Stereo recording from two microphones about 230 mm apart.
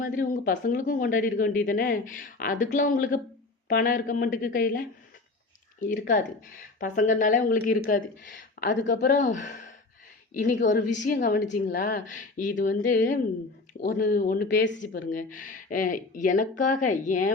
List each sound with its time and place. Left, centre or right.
0.0 s speech: left
5.8 s speech: left
14.8 s speech: left